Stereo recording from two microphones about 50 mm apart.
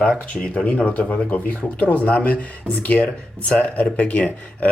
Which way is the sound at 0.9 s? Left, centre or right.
Left.